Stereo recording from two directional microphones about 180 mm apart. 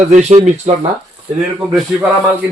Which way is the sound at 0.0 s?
40° right (ahead or behind).